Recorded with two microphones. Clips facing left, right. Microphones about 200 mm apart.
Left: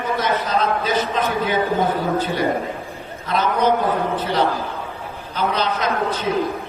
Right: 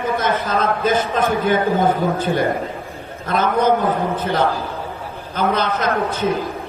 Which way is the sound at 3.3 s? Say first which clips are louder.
Right 2 dB; 50° right (ahead or behind).